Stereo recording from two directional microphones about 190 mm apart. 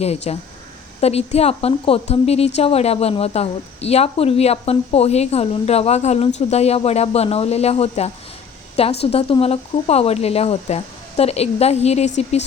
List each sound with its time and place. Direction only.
0.0 s a woman's voice: 35° left (ahead or behind)